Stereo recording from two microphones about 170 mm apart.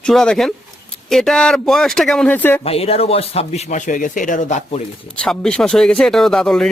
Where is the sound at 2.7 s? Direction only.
35° left (ahead or behind).